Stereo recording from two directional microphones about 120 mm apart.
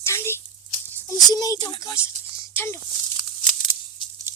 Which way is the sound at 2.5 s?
20° left (ahead or behind).